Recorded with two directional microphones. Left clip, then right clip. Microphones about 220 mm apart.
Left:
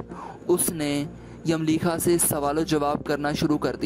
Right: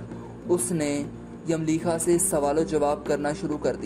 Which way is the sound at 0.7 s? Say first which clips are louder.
Even; 65° left (ahead or behind).